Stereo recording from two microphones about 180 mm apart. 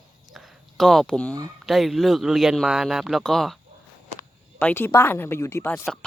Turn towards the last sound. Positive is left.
turn(degrees=15)  # may be behind; listen again after turning